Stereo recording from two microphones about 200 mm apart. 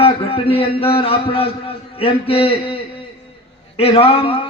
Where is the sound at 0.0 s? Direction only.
30° left (ahead or behind).